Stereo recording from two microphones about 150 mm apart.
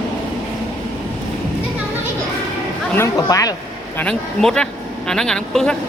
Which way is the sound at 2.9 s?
20° left (ahead or behind).